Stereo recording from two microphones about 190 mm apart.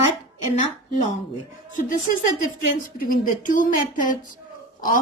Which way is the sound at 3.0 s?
45° left (ahead or behind).